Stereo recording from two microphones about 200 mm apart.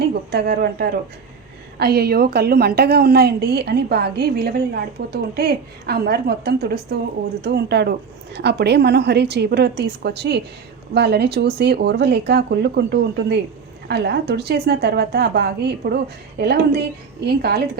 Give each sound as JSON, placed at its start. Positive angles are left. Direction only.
{"t": 0.1, "sound": "a woman's voice", "side_deg": -55}